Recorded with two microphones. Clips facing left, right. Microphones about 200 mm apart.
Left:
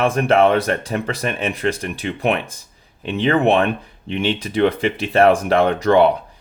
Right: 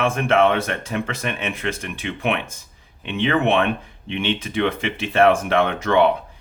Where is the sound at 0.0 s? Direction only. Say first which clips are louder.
Left 3 dB; 35° left (ahead or behind).